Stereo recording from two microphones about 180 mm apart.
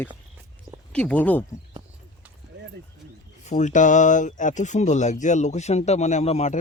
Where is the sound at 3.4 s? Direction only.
40° left (ahead or behind).